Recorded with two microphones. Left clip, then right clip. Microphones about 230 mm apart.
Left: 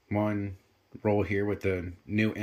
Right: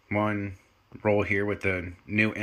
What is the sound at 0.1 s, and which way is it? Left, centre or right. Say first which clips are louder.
Speech: right 3 dB; centre.